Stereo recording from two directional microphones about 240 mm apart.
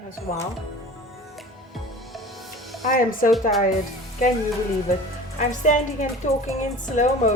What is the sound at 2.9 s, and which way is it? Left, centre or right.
Speech, left.